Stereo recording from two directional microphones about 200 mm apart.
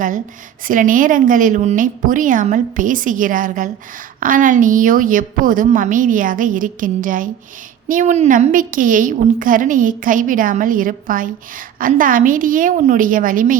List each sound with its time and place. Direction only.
0.7 s a woman's voice: 40° right (ahead or behind)